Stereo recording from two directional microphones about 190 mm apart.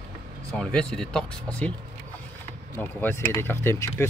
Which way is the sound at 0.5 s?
5° left (ahead or behind).